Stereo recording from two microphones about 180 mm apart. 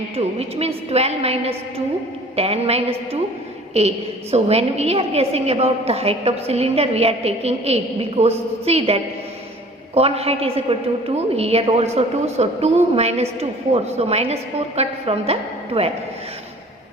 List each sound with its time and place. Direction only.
0.2 s a woman's voice: 35° right (ahead or behind)